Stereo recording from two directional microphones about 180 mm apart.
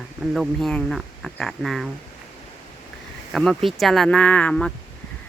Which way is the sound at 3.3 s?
Centre (ahead or behind).